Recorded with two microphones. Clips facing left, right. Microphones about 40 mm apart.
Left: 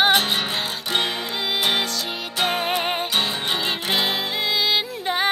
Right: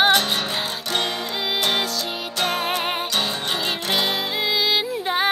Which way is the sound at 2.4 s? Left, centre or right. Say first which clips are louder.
Left 1 dB; centre.